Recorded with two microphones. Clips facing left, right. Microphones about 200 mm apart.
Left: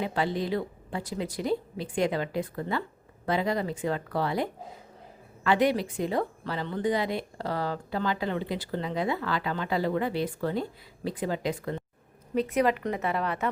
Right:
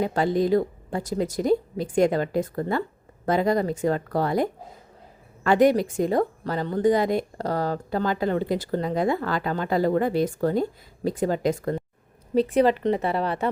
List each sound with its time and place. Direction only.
0.0 s a woman's voice: 45° right (ahead or behind)
12.3 s a woman's voice: 30° right (ahead or behind)